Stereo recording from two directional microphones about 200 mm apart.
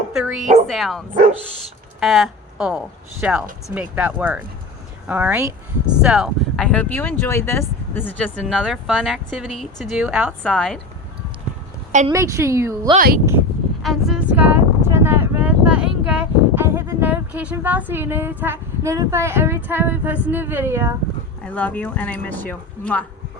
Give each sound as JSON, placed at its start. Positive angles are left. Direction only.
{"t": 0.1, "sound": "a woman's voice", "side_deg": -5}
{"t": 8.4, "sound": "speech", "side_deg": 0}
{"t": 12.0, "sound": "a woman's voice", "side_deg": -15}
{"t": 13.0, "sound": "speech", "side_deg": -45}
{"t": 13.8, "sound": "a sound", "side_deg": 0}
{"t": 21.4, "sound": "speech", "side_deg": 5}